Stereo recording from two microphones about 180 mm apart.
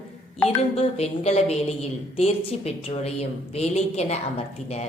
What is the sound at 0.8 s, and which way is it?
A woman's voice, 35° left (ahead or behind).